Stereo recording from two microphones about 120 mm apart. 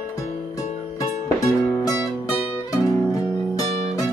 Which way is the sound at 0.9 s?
30° left (ahead or behind).